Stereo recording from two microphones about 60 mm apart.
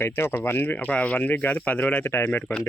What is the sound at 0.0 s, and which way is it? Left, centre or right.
Speech, left.